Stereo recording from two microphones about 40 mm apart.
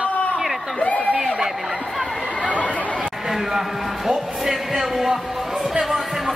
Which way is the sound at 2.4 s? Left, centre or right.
Left.